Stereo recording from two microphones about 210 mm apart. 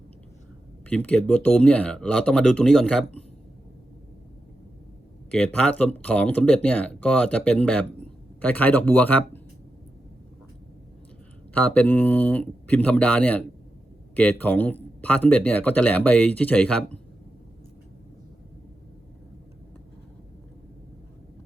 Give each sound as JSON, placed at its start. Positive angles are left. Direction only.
{"t": 0.9, "sound": "speech", "side_deg": 5}
{"t": 5.3, "sound": "speech", "side_deg": 5}
{"t": 11.5, "sound": "speech", "side_deg": 10}